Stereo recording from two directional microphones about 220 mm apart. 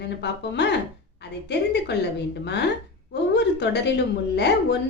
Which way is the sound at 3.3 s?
50° left (ahead or behind).